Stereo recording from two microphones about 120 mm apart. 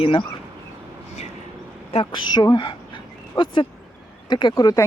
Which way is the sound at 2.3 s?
35° left (ahead or behind).